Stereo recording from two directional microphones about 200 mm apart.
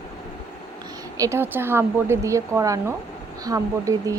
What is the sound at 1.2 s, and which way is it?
Speech, 10° right (ahead or behind).